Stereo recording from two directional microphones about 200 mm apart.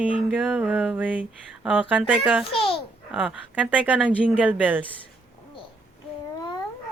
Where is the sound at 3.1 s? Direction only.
5° right (ahead or behind).